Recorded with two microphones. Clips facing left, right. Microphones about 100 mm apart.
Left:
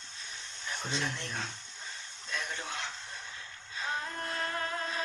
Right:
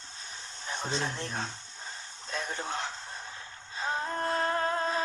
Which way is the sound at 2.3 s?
35° right (ahead or behind).